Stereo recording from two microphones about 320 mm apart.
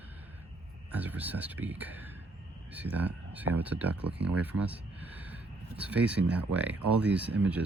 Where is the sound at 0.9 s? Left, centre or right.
Centre.